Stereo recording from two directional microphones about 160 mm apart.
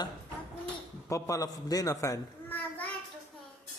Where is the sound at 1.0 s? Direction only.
20° left (ahead or behind).